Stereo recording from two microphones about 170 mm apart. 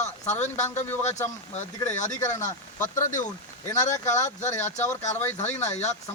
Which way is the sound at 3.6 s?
15° left (ahead or behind).